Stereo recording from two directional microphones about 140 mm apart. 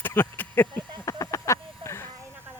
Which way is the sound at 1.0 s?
25° left (ahead or behind).